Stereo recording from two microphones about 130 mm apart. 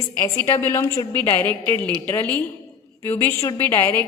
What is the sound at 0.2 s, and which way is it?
A woman's voice, 20° left (ahead or behind).